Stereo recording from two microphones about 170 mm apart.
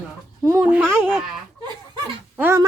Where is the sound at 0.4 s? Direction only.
15° right (ahead or behind).